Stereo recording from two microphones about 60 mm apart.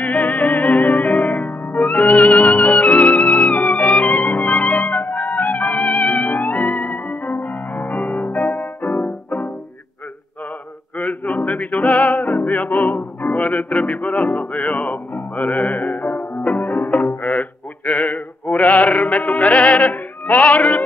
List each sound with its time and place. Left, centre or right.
0.0 s music: left
11.0 s music: left